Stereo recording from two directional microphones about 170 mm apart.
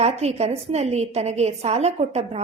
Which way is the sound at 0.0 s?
40° right (ahead or behind).